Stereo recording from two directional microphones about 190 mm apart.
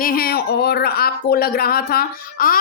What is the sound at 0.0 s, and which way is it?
Speech, 50° left (ahead or behind).